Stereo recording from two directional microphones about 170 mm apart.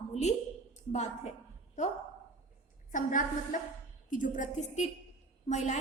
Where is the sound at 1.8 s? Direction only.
45° left (ahead or behind).